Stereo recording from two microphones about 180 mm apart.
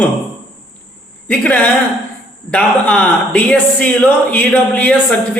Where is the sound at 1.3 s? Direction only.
10° left (ahead or behind).